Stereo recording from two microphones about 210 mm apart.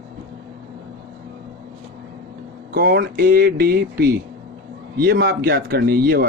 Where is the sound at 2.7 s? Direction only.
50° right (ahead or behind).